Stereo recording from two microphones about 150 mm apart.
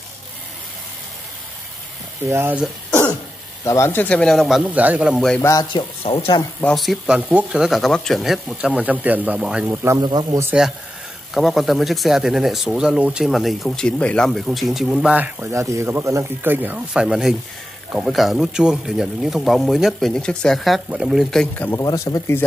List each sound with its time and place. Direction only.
2.2 s speech: 15° right (ahead or behind)
3.6 s speech: 20° left (ahead or behind); by 5.2 s 10° right (ahead or behind)
5.4 s speech: 25° left (ahead or behind)
6.6 s speech: centre (ahead or behind)
9.8 s speech: 25° right (ahead or behind)
10.4 s speech: 5° right (ahead or behind); by 21.8 s 10° left (ahead or behind)
21.8 s speech: 25° left (ahead or behind)